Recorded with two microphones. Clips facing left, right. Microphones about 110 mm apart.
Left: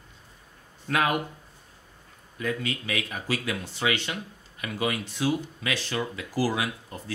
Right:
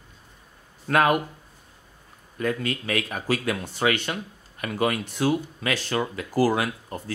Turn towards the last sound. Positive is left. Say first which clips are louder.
# right 3 dB
turn(degrees=-45)  # may be behind; listen again after turning